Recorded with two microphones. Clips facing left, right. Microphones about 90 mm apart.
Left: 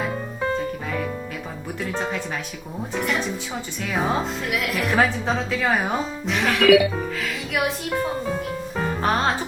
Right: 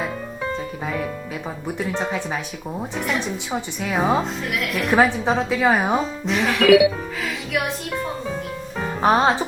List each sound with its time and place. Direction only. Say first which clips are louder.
2.0 s a woman's voice: right 2 dB; 15° right (ahead or behind)
2.9 s speech: left 1 dB; centre (ahead or behind)
4.9 s a woman's voice: right 4 dB; 15° right (ahead or behind)
6.2 s speech: even; centre (ahead or behind)
9.0 s speech: right 6 dB; 15° right (ahead or behind)